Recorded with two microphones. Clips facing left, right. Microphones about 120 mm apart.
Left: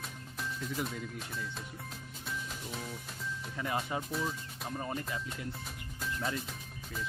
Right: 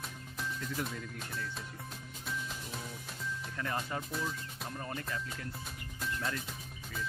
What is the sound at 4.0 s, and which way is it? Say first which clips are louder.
Speech: left 2 dB; centre (ahead or behind).